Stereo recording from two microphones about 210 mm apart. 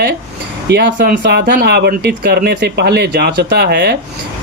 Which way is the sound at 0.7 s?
45° right (ahead or behind).